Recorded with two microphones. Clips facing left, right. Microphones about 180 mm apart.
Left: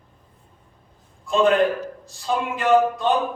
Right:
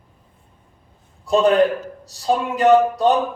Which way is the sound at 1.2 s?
40° right (ahead or behind).